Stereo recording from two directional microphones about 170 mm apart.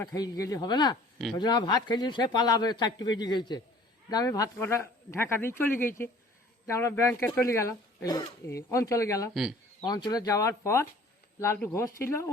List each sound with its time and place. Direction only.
0.0 s a man's voice: 20° left (ahead or behind)
9.3 s speech: centre (ahead or behind)
9.8 s a man's voice: 25° left (ahead or behind)